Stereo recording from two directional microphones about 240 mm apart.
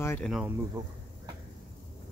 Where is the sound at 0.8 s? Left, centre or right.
Centre.